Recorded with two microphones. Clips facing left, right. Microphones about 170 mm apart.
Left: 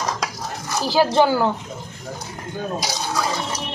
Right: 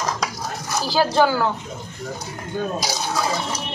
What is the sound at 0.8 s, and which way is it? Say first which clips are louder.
Speech: left 2 dB; 20° left (ahead or behind).